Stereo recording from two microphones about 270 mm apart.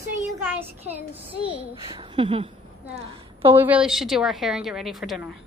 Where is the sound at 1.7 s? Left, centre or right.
Centre.